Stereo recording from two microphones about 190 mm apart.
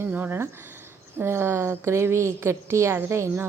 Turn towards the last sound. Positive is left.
turn(degrees=-15)  # may be behind; listen again after turning